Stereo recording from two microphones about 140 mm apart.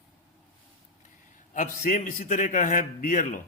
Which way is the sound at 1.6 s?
75° left (ahead or behind).